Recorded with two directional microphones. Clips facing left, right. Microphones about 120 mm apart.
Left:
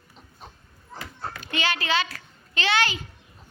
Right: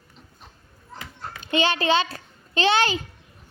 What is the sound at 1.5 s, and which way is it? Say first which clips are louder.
A child's voice: right 6 dB; 25° right (ahead or behind).